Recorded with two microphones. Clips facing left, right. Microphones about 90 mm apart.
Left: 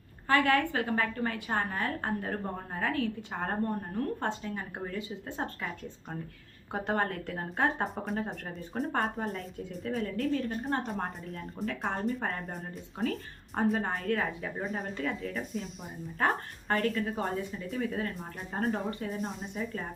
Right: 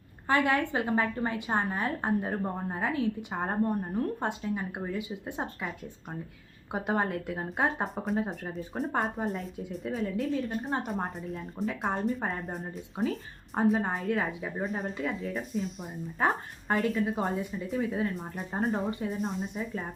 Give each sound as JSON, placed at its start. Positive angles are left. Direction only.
{"t": 0.3, "sound": "a woman's voice", "side_deg": -20}
{"t": 6.7, "sound": "a woman's voice", "side_deg": -10}
{"t": 11.7, "sound": "a woman's voice", "side_deg": -15}
{"t": 12.3, "sound": "a woman's voice", "side_deg": 0}
{"t": 14.1, "sound": "a woman's voice", "side_deg": -15}
{"t": 14.6, "sound": "a woman's voice", "side_deg": 0}